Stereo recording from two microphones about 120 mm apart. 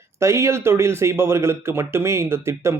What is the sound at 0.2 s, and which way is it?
Speech, 25° right (ahead or behind).